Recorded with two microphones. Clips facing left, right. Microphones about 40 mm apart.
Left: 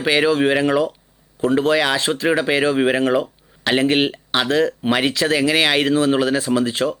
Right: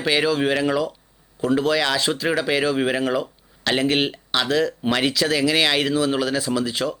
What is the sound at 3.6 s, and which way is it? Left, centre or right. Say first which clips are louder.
Speech: left 3 dB; left.